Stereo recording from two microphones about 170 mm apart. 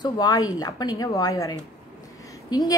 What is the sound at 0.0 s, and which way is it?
A woman's voice, 25° left (ahead or behind).